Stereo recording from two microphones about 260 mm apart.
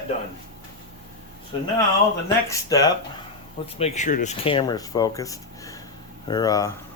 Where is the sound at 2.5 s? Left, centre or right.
Centre.